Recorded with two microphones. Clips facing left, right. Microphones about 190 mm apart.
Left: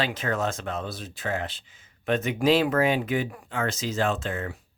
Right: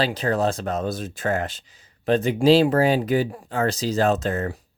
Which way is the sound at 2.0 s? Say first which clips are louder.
Right 5 dB; 35° right (ahead or behind).